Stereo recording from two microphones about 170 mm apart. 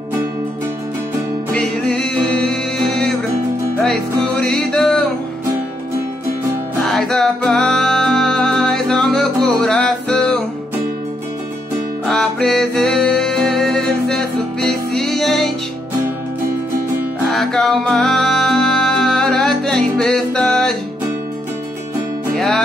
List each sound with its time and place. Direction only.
1.5 s music: 5° left (ahead or behind)
6.8 s music: centre (ahead or behind)
12.1 s music: 5° left (ahead or behind)
17.3 s music: 5° left (ahead or behind)